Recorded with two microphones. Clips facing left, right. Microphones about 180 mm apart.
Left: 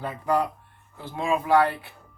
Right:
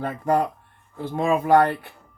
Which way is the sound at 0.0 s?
50° right (ahead or behind).